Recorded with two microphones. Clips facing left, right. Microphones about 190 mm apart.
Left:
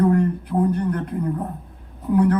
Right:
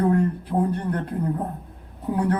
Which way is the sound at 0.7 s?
30° right (ahead or behind).